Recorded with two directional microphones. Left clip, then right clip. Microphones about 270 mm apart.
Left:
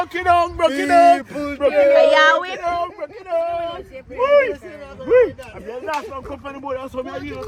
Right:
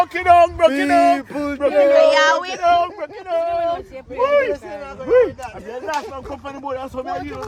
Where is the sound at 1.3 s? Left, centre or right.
Right.